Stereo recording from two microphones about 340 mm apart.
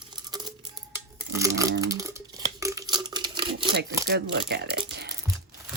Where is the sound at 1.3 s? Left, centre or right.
Centre.